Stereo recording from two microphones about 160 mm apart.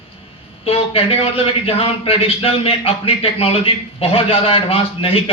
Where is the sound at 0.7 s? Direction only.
35° left (ahead or behind).